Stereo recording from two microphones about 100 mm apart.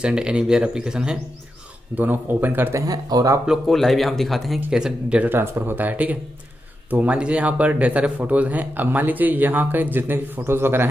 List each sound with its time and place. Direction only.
0.0 s speech: 10° right (ahead or behind)
2.0 s speech: 20° right (ahead or behind)
2.9 s speech: 40° right (ahead or behind)
3.4 s speech: centre (ahead or behind)
5.3 s speech: 25° right (ahead or behind)